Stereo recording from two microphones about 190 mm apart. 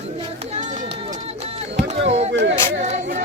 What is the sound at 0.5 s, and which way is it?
Run, 40° right (ahead or behind).